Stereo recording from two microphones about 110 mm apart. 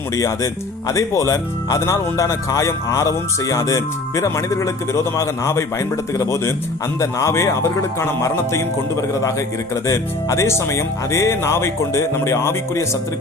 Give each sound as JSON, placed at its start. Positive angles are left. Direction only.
{"t": 0.2, "sound": "speech", "side_deg": 30}